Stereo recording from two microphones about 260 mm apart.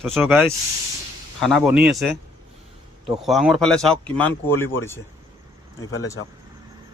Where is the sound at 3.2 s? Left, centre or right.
Centre.